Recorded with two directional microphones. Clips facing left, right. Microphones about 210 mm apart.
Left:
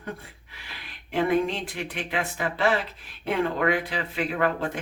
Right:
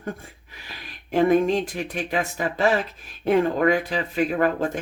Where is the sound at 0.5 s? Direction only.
40° right (ahead or behind).